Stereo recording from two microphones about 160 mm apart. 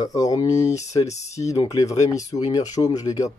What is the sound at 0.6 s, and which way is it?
Speech, 45° left (ahead or behind).